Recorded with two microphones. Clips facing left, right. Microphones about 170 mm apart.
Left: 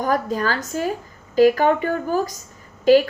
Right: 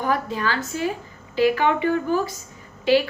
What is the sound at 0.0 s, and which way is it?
A woman's voice, 40° left (ahead or behind).